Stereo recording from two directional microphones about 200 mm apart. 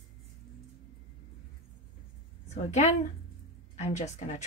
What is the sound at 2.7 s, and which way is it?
A woman's voice, 35° left (ahead or behind).